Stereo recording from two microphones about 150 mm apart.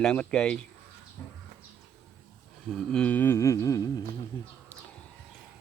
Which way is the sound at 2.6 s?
5° left (ahead or behind).